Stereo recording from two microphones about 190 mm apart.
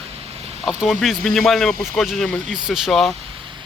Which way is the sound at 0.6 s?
5° right (ahead or behind).